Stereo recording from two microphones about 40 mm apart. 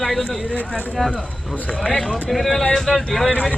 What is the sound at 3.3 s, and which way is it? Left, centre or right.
Speech, left.